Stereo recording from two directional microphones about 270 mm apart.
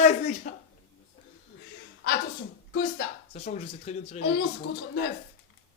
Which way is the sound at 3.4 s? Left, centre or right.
Left.